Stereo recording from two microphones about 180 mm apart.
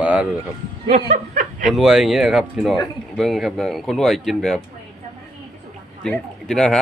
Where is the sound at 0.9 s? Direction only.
45° right (ahead or behind).